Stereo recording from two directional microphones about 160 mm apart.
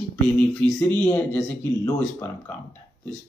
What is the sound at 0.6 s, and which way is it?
Speech, 10° left (ahead or behind).